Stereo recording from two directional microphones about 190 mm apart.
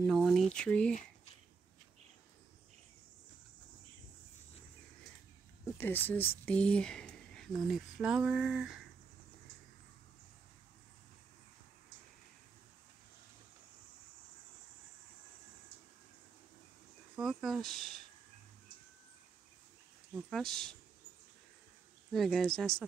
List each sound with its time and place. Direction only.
0.0 s speech: centre (ahead or behind)
5.8 s speech: 10° left (ahead or behind)
17.1 s speech: centre (ahead or behind)
20.2 s speech: centre (ahead or behind)
22.1 s speech: centre (ahead or behind)